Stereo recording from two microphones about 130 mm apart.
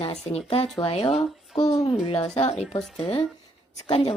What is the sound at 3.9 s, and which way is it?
Speech, 45° left (ahead or behind).